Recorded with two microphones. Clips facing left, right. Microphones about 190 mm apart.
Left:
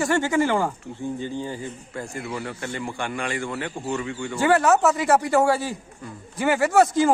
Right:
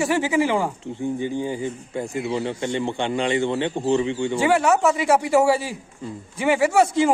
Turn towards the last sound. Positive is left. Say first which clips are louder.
# even
turn(degrees=0)  # may be behind; listen again after turning